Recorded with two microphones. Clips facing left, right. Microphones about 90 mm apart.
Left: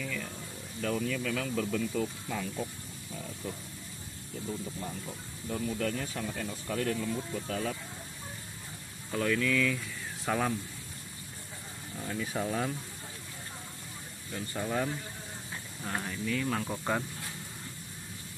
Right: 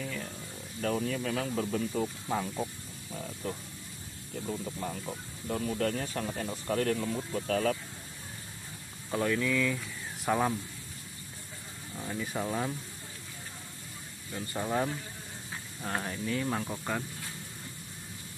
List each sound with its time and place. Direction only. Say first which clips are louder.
0.7 s speech: right 1 dB; 40° right (ahead or behind)
3.4 s speech: right 3 dB; 50° right (ahead or behind)
4.5 s speech: right 2 dB; 35° right (ahead or behind); by 7.7 s 55° right (ahead or behind)
9.1 s speech: even; 20° right (ahead or behind)
12.1 s speech: even; 5° right (ahead or behind)
14.5 s speech: right 2 dB; 20° right (ahead or behind)
15.8 s speech: right 1 dB; 35° right (ahead or behind)
16.6 s speech: left 2 dB; 10° left (ahead or behind)